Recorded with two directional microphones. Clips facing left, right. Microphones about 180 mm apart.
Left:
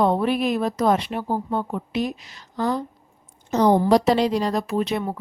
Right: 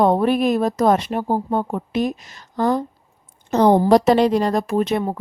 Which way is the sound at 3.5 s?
60° right (ahead or behind).